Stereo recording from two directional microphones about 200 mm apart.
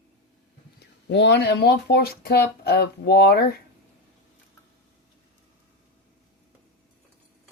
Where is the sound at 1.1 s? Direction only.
60° left (ahead or behind).